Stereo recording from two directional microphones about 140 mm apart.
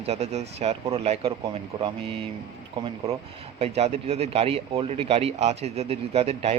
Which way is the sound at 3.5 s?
45° right (ahead or behind).